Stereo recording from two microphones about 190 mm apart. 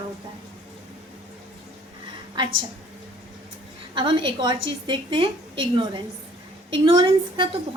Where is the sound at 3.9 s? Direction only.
25° right (ahead or behind).